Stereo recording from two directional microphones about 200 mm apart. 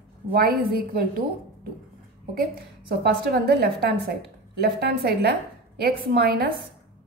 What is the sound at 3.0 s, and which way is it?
A woman's voice, 55° right (ahead or behind).